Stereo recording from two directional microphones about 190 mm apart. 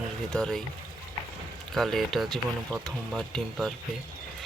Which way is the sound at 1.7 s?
Centre (ahead or behind).